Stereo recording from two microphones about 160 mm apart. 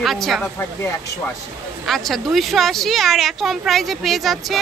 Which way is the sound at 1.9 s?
Centre (ahead or behind).